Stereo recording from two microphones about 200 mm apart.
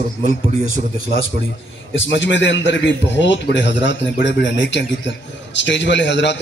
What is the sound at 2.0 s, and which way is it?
A man's voice, 65° left (ahead or behind).